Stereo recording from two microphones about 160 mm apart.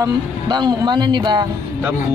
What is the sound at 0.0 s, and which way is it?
Speech, 25° right (ahead or behind).